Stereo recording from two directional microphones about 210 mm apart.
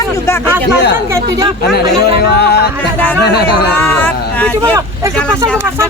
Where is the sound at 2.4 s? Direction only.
50° left (ahead or behind).